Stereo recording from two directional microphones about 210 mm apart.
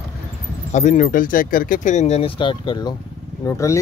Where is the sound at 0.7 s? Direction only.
35° left (ahead or behind).